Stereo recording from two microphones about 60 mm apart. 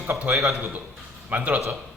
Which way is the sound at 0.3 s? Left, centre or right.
Right.